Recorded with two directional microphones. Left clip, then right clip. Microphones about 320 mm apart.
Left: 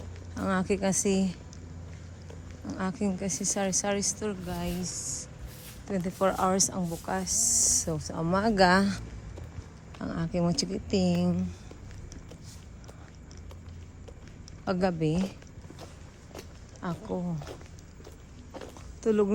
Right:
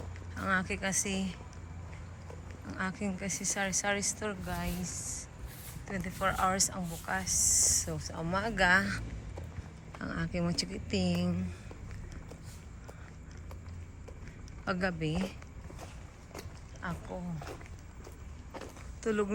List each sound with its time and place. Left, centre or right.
0.3 s speech: centre
2.6 s speech: centre
10.0 s speech: centre
14.6 s speech: centre
16.8 s a sound: centre
18.6 s walk: centre